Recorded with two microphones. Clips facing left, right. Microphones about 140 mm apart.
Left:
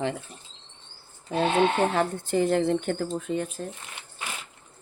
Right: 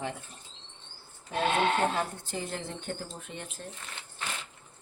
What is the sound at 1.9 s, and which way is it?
Speech, 65° left (ahead or behind).